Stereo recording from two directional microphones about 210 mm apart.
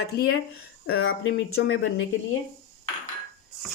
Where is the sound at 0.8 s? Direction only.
75° left (ahead or behind).